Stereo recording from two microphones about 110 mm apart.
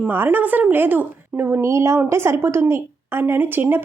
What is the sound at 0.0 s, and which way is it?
Speech, 20° right (ahead or behind).